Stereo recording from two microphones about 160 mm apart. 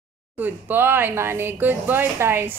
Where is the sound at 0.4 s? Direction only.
10° right (ahead or behind).